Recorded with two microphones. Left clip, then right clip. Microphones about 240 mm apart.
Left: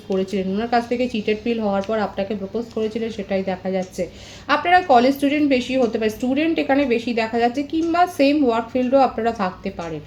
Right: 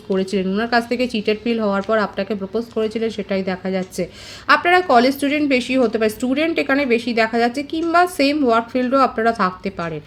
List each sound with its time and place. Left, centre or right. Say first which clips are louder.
0.1 s a woman's voice: right 2 dB; right